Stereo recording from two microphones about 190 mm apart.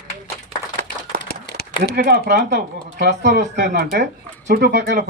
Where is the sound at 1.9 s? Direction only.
55° right (ahead or behind).